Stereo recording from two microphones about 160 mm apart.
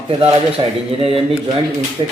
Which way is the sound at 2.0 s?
30° right (ahead or behind).